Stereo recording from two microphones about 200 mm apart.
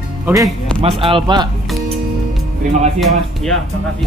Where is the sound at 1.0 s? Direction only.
25° right (ahead or behind).